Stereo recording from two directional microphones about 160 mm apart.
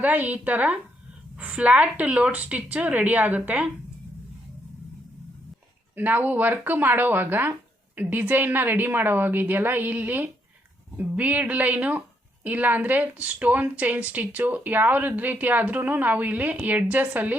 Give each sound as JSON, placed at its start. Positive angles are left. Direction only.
{"t": 0.0, "sound": "a woman's voice", "side_deg": -10}
{"t": 6.0, "sound": "a woman's voice", "side_deg": -10}